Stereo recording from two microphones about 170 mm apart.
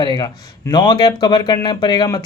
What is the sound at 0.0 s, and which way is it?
A man's voice, 25° left (ahead or behind).